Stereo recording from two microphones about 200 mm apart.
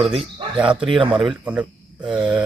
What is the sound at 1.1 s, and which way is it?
Speech, 5° right (ahead or behind).